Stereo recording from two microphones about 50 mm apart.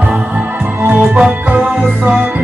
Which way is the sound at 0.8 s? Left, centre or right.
Right.